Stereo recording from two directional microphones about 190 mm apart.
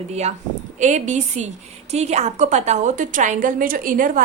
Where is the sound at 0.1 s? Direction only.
35° right (ahead or behind).